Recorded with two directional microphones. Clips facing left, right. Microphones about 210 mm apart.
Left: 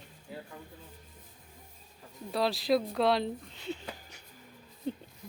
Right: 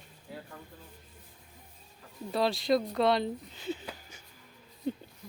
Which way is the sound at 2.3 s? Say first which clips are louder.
Right 1 dB; centre (ahead or behind).